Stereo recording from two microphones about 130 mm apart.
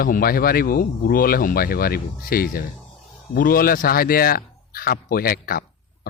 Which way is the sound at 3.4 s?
90° left.